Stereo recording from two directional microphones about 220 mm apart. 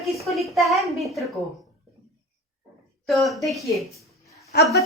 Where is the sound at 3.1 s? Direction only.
Centre (ahead or behind).